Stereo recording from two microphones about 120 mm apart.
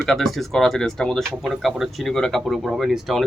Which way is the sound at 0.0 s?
Centre (ahead or behind).